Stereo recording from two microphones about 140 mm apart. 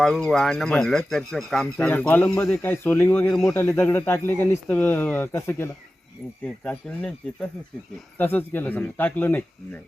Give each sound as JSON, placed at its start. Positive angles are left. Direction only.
{"t": 0.0, "sound": "speech", "side_deg": 0}
{"t": 6.4, "sound": "speech", "side_deg": 5}